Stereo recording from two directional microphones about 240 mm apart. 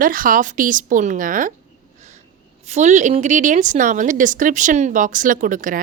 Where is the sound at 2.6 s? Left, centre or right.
Right.